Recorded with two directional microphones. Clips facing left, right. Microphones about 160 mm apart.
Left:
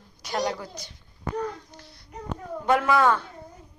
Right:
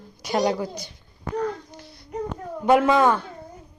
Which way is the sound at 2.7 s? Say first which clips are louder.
Right 4 dB; 20° right (ahead or behind).